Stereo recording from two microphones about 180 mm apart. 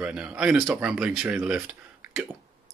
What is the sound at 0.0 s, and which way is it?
Speech, 5° right (ahead or behind).